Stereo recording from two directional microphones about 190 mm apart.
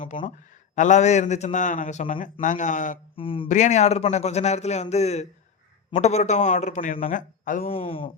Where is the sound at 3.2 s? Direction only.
30° left (ahead or behind).